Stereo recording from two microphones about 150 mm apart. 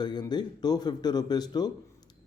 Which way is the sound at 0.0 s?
30° left (ahead or behind).